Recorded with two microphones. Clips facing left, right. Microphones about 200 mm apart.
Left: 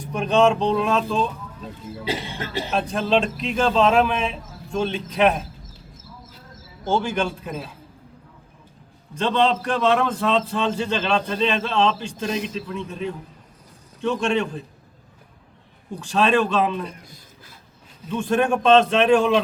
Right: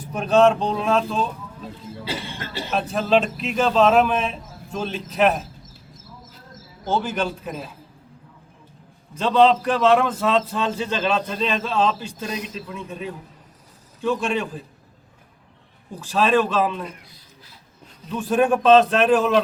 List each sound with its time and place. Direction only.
0.0 s a man's voice: centre (ahead or behind)
2.0 s speech: 15° left (ahead or behind)
2.7 s a man's voice: 5° right (ahead or behind)
6.8 s a man's voice: 5° right (ahead or behind)
9.1 s a man's voice: 5° right (ahead or behind)
16.0 s a man's voice: 5° right (ahead or behind)
18.1 s a man's voice: 5° right (ahead or behind)